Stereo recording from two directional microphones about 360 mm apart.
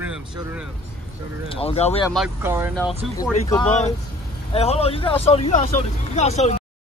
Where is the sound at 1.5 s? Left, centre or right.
Centre.